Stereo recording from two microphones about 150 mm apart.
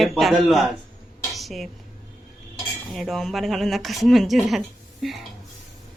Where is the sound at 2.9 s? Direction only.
Centre (ahead or behind).